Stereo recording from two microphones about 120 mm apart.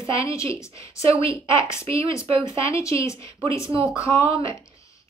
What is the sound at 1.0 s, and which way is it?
Speech, 55° right (ahead or behind).